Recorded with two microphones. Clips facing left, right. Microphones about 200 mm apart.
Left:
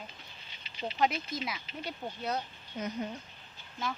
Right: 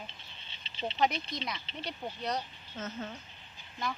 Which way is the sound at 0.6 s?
25° right (ahead or behind).